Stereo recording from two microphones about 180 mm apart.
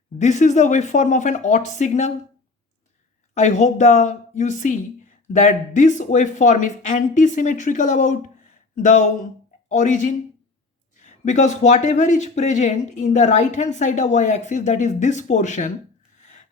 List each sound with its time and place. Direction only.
0.2 s speech: 40° left (ahead or behind)
3.3 s speech: 40° left (ahead or behind)
16.1 s a sound: 40° left (ahead or behind)